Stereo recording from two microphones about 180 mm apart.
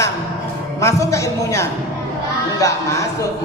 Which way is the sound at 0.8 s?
15° left (ahead or behind).